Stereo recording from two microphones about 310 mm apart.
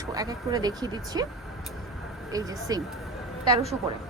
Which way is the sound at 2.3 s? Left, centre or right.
Centre.